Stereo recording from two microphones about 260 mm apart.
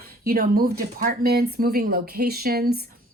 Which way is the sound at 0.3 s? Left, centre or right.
Right.